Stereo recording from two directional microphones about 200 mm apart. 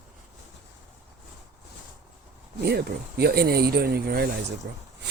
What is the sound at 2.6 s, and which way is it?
Speech, 55° right (ahead or behind).